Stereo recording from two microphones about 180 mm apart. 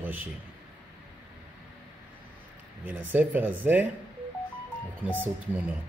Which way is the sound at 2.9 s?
10° right (ahead or behind).